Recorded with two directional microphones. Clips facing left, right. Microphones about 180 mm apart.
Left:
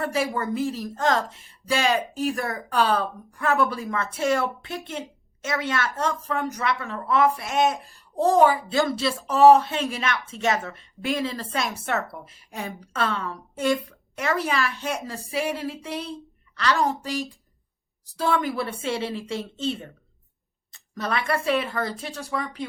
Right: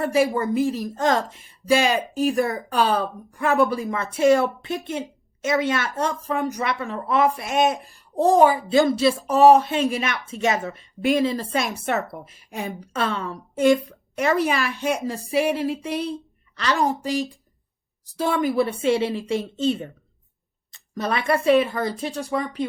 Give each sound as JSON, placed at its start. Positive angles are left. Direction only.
{"t": 0.0, "sound": "speech", "side_deg": -15}